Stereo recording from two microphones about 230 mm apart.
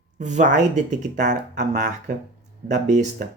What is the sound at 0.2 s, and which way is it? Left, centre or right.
Speech, right.